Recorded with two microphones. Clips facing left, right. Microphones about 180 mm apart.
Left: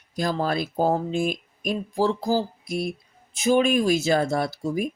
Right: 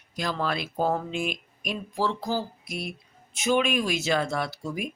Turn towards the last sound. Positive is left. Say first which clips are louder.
# left 6 dB
turn(degrees=40)  # may be behind; listen again after turning